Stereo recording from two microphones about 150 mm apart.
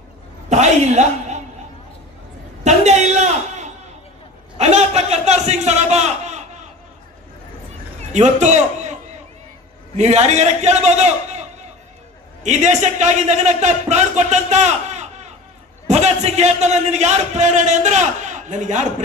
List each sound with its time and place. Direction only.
0.5 s a man's voice: 50° right (ahead or behind)
2.6 s a sound: 50° right (ahead or behind)
4.6 s a man's voice: 50° right (ahead or behind)
8.1 s a man's voice: 50° right (ahead or behind)
9.9 s a man's voice: 50° right (ahead or behind)
12.4 s a man's voice: 50° right (ahead or behind)